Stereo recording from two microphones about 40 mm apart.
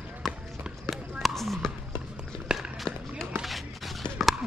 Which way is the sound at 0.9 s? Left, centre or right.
Centre.